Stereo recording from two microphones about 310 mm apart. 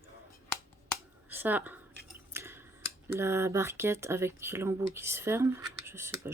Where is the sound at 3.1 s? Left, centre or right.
Centre.